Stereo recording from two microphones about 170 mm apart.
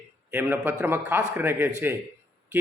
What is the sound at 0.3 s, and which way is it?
Speech, 15° right (ahead or behind).